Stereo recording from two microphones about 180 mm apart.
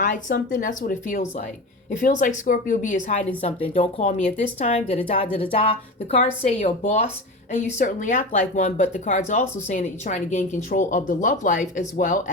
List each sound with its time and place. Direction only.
0.0 s speech: 45° left (ahead or behind)